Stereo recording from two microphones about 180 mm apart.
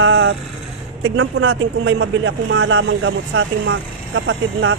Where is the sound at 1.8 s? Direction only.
90° right.